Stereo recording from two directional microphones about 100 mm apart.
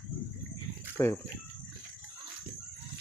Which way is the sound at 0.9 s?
20° left (ahead or behind).